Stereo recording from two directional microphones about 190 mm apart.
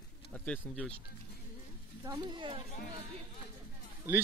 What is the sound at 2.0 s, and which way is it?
Speech, 20° right (ahead or behind).